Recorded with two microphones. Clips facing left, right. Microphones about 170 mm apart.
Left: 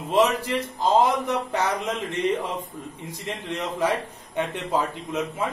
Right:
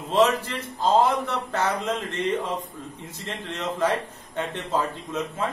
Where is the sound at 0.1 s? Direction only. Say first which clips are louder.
Even; 15° left (ahead or behind).